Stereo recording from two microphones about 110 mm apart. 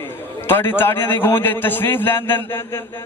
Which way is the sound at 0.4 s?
20° left (ahead or behind).